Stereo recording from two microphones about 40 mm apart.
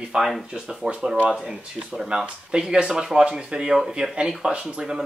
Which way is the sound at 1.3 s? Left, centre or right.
Centre.